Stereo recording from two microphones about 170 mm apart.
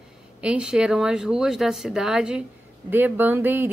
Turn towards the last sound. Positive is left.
turn(degrees=-10)  # may be behind; listen again after turning